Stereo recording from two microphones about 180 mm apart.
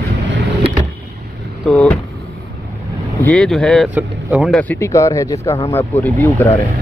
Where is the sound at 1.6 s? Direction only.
5° left (ahead or behind).